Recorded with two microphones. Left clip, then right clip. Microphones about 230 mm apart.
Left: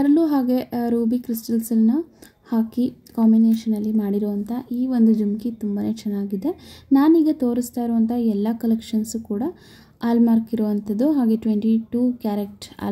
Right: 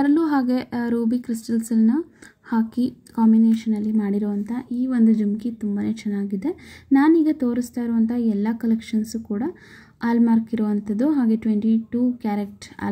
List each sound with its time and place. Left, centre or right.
0.0 s a woman's voice: centre